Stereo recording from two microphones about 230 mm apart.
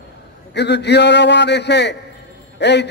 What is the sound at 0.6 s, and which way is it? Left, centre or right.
A man's voice, left.